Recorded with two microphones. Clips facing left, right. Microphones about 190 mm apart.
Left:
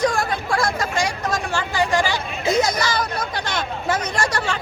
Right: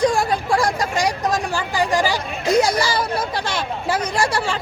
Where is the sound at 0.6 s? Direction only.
35° right (ahead or behind).